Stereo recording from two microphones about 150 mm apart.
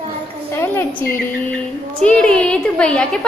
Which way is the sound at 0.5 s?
15° left (ahead or behind).